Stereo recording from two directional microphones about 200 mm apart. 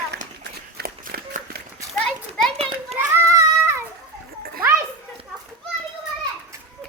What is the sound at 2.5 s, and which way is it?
Children playing, 30° right (ahead or behind).